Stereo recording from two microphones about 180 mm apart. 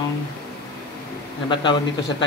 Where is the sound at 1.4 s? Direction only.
25° left (ahead or behind).